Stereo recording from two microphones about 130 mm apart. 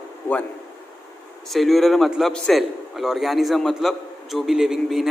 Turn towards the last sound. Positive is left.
turn(degrees=-5)  # may be behind; listen again after turning